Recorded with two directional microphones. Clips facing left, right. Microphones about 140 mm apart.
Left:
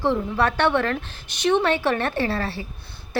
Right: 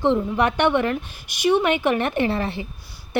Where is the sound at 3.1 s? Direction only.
20° right (ahead or behind).